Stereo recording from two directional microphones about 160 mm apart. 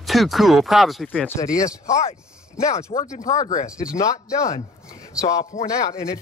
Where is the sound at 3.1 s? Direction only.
50° left (ahead or behind).